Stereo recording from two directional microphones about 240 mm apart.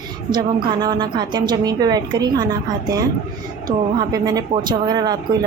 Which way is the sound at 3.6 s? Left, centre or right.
Centre.